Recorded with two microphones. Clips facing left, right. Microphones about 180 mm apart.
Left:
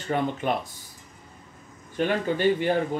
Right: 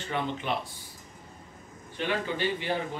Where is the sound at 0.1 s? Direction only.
45° left (ahead or behind).